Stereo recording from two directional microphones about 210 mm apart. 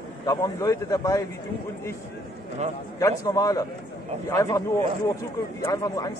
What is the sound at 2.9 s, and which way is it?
Speech, 15° left (ahead or behind).